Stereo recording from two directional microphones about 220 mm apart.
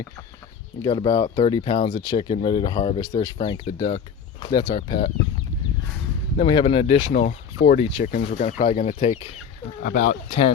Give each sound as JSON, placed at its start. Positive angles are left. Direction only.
{"t": 0.8, "sound": "speech", "side_deg": 20}
{"t": 6.3, "sound": "speech", "side_deg": 25}
{"t": 7.1, "sound": "speech", "side_deg": 35}